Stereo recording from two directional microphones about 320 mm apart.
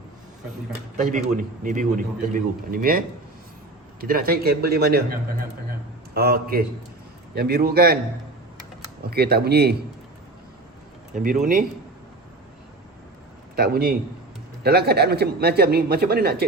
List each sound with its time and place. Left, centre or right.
1.0 s a man's voice: right
4.0 s a man's voice: right
6.1 s a man's voice: right
9.0 s a man's voice: right
11.1 s a man's voice: right
13.6 s a man's voice: right